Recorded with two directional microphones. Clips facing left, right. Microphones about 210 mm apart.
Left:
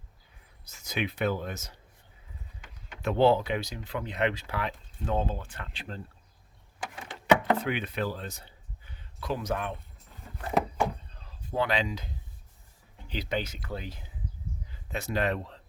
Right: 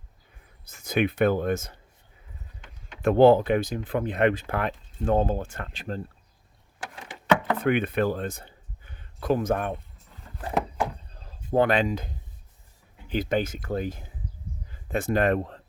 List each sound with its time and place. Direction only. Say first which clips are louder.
0.6 s speech: right 8 dB; 55° right (ahead or behind)
3.0 s speech: right 6 dB; 50° right (ahead or behind)
7.5 s speech: right 6 dB; 55° right (ahead or behind)
10.3 s a sound: even; centre (ahead or behind)
11.3 s speech: right 7 dB; 50° right (ahead or behind)
13.1 s speech: right 7 dB; 50° right (ahead or behind)